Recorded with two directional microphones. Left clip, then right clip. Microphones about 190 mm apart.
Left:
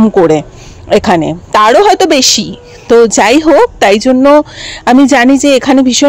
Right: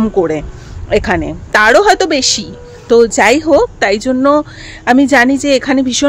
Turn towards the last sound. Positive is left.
turn(degrees=30)  # may be behind; listen again after turning